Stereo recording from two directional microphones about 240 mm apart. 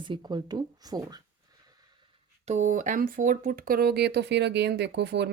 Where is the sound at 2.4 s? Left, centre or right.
Right.